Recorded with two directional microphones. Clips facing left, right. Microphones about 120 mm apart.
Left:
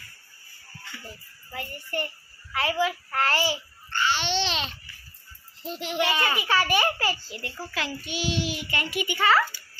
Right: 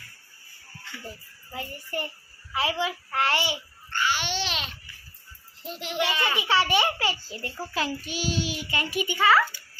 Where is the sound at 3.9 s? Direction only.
10° right (ahead or behind).